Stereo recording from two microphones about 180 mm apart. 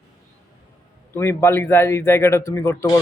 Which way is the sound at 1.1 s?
15° left (ahead or behind).